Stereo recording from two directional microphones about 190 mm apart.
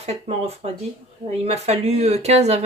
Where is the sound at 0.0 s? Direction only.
35° right (ahead or behind).